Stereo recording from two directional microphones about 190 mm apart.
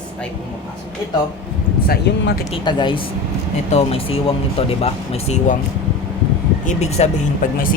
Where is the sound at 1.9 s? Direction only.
60° left (ahead or behind).